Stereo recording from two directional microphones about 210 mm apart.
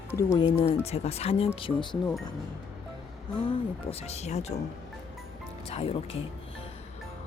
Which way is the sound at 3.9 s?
30° left (ahead or behind).